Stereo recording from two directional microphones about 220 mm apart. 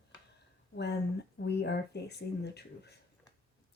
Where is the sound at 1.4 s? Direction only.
50° left (ahead or behind).